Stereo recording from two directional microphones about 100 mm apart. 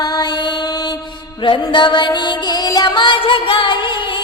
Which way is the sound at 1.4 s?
55° left (ahead or behind).